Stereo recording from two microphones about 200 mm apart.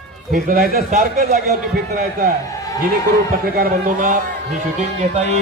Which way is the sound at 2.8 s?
45° right (ahead or behind).